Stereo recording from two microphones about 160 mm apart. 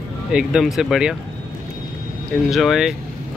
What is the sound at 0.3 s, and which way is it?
Speech, 5° right (ahead or behind).